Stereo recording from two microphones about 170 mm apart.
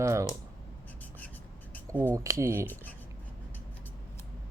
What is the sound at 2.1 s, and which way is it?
Speech, 20° right (ahead or behind).